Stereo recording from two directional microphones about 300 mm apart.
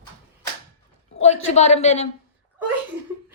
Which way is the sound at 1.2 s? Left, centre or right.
Left.